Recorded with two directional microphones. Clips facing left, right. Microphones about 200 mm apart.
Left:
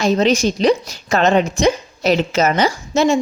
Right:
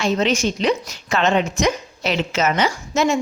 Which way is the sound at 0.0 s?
35° left (ahead or behind).